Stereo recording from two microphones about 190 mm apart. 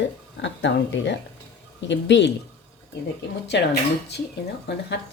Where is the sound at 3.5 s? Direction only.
65° left (ahead or behind).